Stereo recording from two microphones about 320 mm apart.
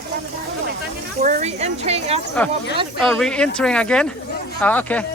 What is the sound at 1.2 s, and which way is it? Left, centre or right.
Speech, right.